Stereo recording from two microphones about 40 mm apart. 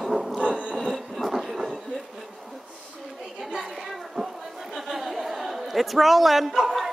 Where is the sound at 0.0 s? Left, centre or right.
Centre.